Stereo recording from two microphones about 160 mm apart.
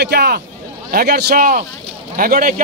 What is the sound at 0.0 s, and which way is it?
A man's voice, 75° right (ahead or behind).